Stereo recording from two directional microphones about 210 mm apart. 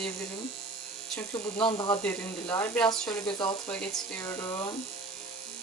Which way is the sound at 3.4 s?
20° left (ahead or behind).